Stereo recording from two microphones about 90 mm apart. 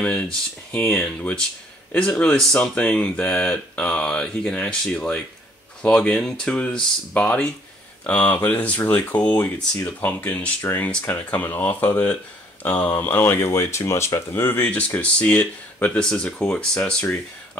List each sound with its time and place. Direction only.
0.0 s speech: 15° left (ahead or behind)